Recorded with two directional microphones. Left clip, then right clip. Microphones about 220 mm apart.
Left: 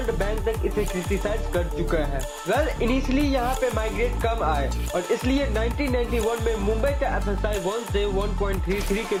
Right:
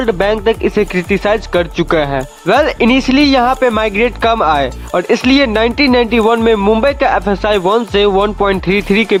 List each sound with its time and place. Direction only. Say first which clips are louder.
0.2 s speech: right 14 dB; 45° right (ahead or behind)